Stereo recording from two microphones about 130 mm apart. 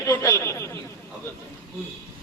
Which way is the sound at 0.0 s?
20° left (ahead or behind).